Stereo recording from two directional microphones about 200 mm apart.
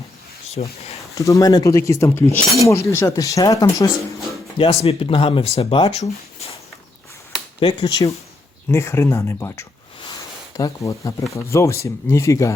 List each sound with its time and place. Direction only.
0.5 s speech: 30° left (ahead or behind)
1.1 s speech: 15° left (ahead or behind)
4.5 s speech: 30° left (ahead or behind)
6.0 s a sound: 30° left (ahead or behind)
7.6 s speech: 25° left (ahead or behind)